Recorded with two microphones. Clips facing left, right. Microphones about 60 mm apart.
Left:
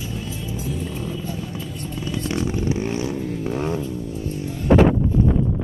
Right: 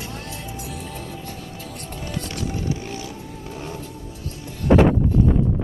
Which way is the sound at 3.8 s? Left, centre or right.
Right.